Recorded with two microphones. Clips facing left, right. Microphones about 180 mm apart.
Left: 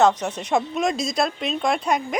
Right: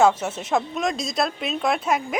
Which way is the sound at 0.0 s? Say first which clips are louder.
Even; 5° right (ahead or behind).